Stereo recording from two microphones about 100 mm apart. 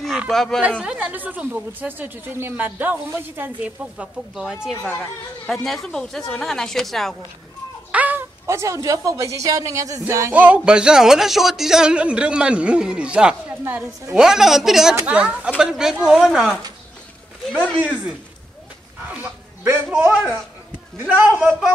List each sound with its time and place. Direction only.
0.3 s speech: 5° left (ahead or behind)
0.8 s a woman's voice: 15° right (ahead or behind); by 7.2 s centre (ahead or behind)
7.9 s a sound: 15° right (ahead or behind)
8.5 s speech: 30° right (ahead or behind)
10.3 s a woman's voice: 15° right (ahead or behind)
17.5 s speech: 10° left (ahead or behind)
17.7 s a woman's voice: 10° right (ahead or behind)
19.0 s dog: 15° right (ahead or behind)
20.0 s a man's voice: 20° right (ahead or behind)
21.4 s a woman's voice: 15° right (ahead or behind)